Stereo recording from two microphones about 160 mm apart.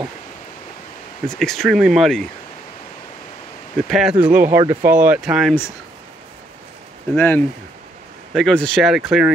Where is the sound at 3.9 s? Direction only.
5° right (ahead or behind).